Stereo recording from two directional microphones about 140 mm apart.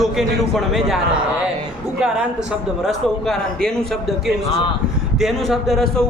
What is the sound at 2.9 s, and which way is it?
Speech, centre (ahead or behind).